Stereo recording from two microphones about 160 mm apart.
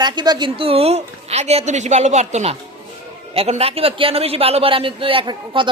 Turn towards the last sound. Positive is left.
turn(degrees=-30)  # may be behind; listen again after turning